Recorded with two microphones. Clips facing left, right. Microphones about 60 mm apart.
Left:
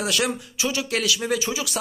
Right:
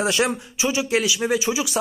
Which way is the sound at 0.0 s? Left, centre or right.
Right.